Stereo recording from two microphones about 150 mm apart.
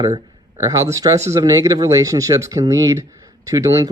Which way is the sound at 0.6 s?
20° right (ahead or behind).